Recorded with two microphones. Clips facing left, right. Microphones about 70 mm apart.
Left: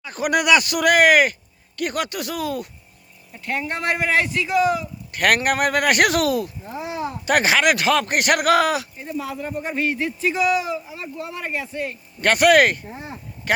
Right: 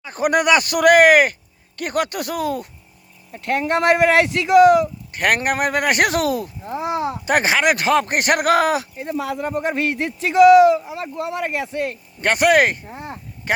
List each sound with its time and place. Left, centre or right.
0.0 s speech: right
3.4 s speech: right
5.1 s speech: right
6.8 s a sound: right
7.3 s speech: right
9.0 s speech: right
12.2 s speech: right